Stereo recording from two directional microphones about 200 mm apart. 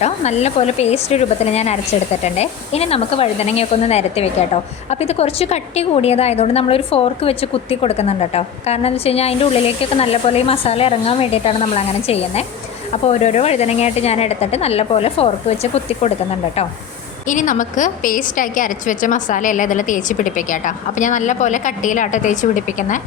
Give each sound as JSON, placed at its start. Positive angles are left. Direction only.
{"t": 0.0, "sound": "speech", "side_deg": 35}
{"t": 17.2, "sound": "speech", "side_deg": 40}